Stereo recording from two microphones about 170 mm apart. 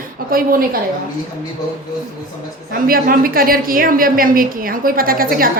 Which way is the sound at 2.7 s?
55° right (ahead or behind).